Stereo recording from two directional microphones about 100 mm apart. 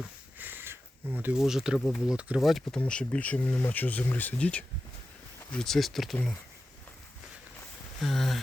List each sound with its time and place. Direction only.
0.3 s a sound: 20° right (ahead or behind)
1.4 s speech: 5° right (ahead or behind)
2.8 s speech: 10° left (ahead or behind)
7.9 s speech: 5° left (ahead or behind)